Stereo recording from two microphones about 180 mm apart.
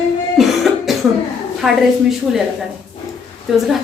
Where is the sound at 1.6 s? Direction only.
Centre (ahead or behind).